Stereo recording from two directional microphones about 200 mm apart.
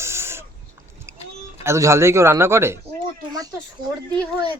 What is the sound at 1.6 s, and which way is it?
Speech, 15° right (ahead or behind).